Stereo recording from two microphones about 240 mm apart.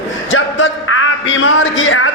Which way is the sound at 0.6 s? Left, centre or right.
Left.